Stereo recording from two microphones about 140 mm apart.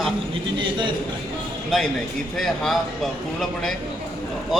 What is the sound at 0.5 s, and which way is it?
Speech, 35° right (ahead or behind).